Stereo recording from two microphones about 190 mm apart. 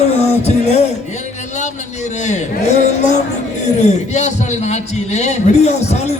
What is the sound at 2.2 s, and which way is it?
A man's voice, 35° left (ahead or behind).